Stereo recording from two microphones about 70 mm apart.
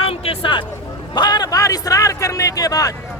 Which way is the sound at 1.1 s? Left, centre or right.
Left.